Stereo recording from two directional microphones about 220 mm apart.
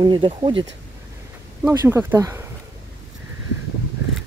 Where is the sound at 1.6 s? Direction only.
10° right (ahead or behind).